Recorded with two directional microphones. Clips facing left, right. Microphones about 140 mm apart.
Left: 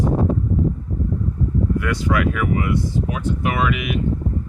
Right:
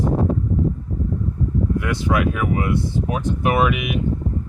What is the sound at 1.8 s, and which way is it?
Speech, 20° right (ahead or behind).